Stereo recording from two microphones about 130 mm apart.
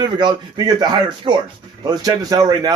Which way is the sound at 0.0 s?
35° right (ahead or behind).